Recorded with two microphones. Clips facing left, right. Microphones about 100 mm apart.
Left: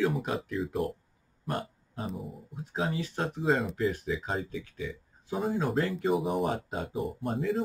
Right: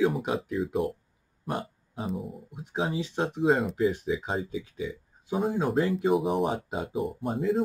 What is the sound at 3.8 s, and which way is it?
Speech, 15° right (ahead or behind).